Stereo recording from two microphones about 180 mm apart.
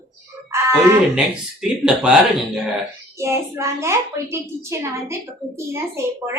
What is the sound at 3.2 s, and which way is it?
A woman's voice, 15° right (ahead or behind).